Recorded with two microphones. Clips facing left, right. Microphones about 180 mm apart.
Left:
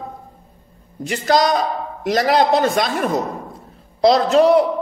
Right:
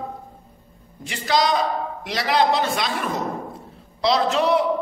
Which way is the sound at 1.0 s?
45° left (ahead or behind).